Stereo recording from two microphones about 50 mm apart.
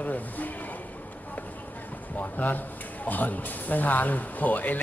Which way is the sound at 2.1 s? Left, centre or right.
Left.